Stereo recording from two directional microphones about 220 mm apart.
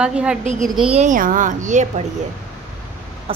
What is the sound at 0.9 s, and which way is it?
A woman's voice, 35° right (ahead or behind).